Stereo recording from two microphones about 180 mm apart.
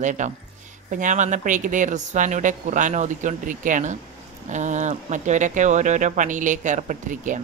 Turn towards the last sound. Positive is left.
turn(degrees=-45)  # may be behind; listen again after turning